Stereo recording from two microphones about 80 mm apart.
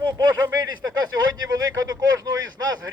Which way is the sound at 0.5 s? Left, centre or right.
Right.